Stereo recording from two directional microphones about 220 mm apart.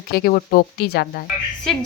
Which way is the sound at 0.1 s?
45° left (ahead or behind).